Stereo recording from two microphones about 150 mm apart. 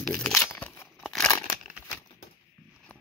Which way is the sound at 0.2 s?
15° left (ahead or behind).